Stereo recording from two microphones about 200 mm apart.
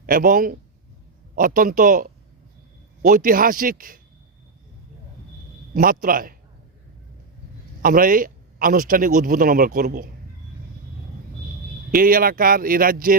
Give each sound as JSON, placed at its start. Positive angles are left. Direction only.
{"t": 0.0, "sound": "speech", "side_deg": -45}
{"t": 5.7, "sound": "speech", "side_deg": -45}
{"t": 7.8, "sound": "speech", "side_deg": -45}
{"t": 11.9, "sound": "speech", "side_deg": -45}